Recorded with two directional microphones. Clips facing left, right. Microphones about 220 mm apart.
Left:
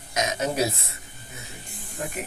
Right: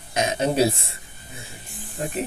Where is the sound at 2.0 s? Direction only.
30° right (ahead or behind).